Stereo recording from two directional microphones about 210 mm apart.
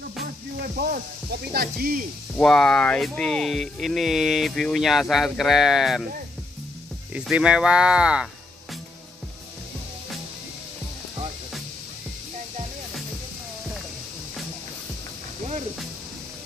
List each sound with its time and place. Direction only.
0.7 s speech: 45° right (ahead or behind)
2.3 s speech: 5° left (ahead or behind)
7.2 s speech: 5° right (ahead or behind)